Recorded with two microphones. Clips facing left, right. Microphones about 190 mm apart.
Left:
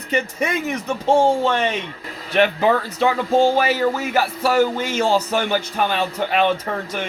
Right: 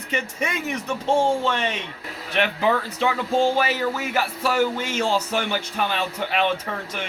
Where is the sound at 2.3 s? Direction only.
40° left (ahead or behind).